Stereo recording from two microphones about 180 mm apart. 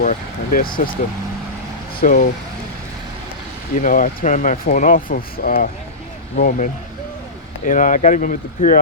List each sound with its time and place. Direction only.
0.0 s speech: 50° left (ahead or behind)
2.0 s speech: 50° left (ahead or behind)
3.8 s speech: 50° left (ahead or behind)